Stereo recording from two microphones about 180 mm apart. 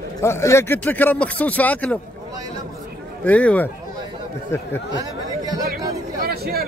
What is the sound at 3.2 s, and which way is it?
Speech, 10° left (ahead or behind).